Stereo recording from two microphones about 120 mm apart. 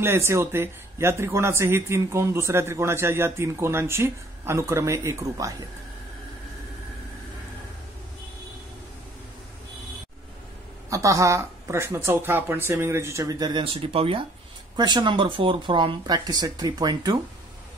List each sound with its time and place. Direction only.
0.0 s speech: 20° right (ahead or behind)
10.9 s speech: 25° right (ahead or behind)
13.7 s speech: 50° right (ahead or behind)
14.8 s speech: 40° right (ahead or behind)